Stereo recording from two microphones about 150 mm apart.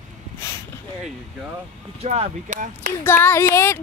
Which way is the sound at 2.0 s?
45° right (ahead or behind).